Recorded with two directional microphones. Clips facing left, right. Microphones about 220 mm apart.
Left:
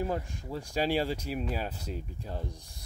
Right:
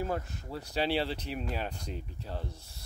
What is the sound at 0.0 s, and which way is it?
Speech, 15° left (ahead or behind).